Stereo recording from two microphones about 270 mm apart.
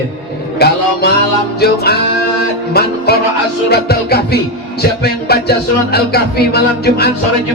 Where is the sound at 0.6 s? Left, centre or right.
Left.